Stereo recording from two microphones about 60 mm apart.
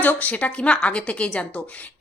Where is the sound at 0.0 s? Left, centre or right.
Left.